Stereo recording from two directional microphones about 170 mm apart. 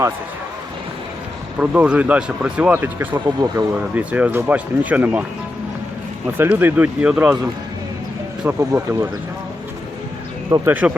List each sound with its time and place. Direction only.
1.5 s speech: 10° right (ahead or behind)
3.2 s speech: 25° right (ahead or behind)
3.8 s speech: 10° right (ahead or behind)
6.3 s speech: 10° right (ahead or behind)
8.4 s speech: 15° right (ahead or behind)
10.5 s speech: 10° right (ahead or behind)